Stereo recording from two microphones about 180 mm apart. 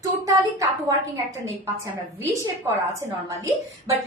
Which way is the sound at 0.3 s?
20° right (ahead or behind).